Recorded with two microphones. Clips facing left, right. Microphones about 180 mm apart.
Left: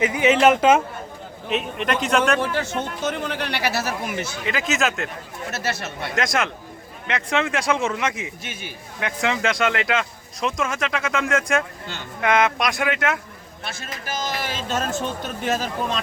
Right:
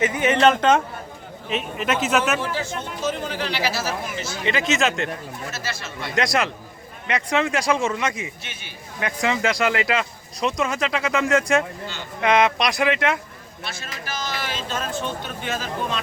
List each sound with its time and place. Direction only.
0.3 s speech: 5° left (ahead or behind)
2.4 s speech: 60° left (ahead or behind)
4.4 s speech: centre (ahead or behind)
5.5 s speech: 60° left (ahead or behind)
6.1 s speech: centre (ahead or behind)
14.2 s a sound: 45° left (ahead or behind)
15.4 s speech: 40° left (ahead or behind)